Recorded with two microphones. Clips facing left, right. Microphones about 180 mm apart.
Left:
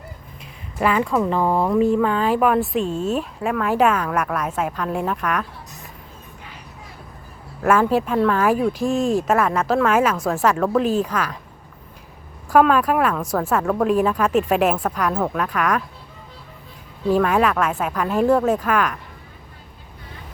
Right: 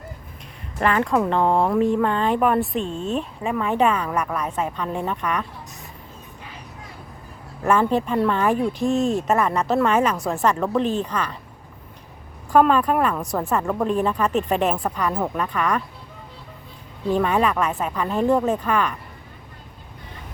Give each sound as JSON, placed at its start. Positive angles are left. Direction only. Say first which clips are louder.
{"t": 0.8, "sound": "speech", "louder": "left 1 dB", "side_deg": 5}
{"t": 7.6, "sound": "speech", "louder": "left 2 dB", "side_deg": 5}
{"t": 12.5, "sound": "speech", "louder": "left 1 dB", "side_deg": 5}
{"t": 13.1, "sound": "speech", "louder": "left 2 dB", "side_deg": -15}
{"t": 13.5, "sound": "speech", "louder": "left 3 dB", "side_deg": 0}
{"t": 15.1, "sound": "speech", "louder": "left 2 dB", "side_deg": -10}
{"t": 15.4, "sound": "speech", "louder": "left 2 dB", "side_deg": 5}
{"t": 17.1, "sound": "speech", "louder": "left 2 dB", "side_deg": 5}